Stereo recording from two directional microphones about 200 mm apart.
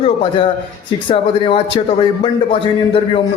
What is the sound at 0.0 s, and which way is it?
A man's voice, 25° left (ahead or behind).